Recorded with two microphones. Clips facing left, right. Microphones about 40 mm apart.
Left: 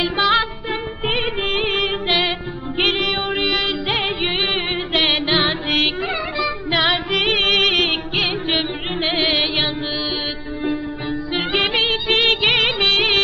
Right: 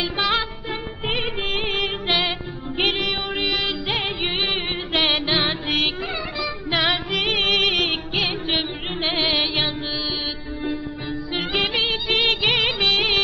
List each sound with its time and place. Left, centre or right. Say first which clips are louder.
0.0 s music: left 5 dB; centre